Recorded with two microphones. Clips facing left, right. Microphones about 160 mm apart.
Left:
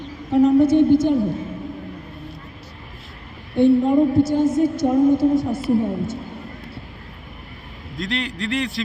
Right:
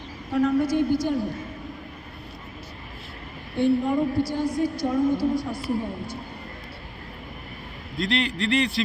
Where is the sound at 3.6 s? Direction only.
20° left (ahead or behind).